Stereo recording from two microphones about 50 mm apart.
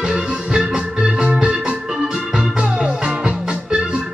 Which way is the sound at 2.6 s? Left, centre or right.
Right.